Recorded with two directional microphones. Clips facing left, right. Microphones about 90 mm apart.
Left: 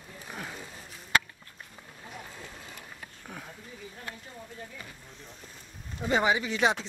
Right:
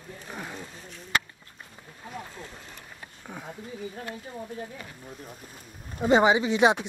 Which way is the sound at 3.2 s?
10° right (ahead or behind).